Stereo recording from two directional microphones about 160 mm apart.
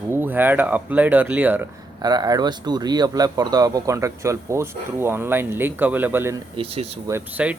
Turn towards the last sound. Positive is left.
turn(degrees=-10)  # may be behind; listen again after turning